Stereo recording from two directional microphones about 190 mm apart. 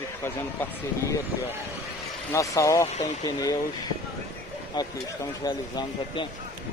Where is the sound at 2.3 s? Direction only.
15° left (ahead or behind).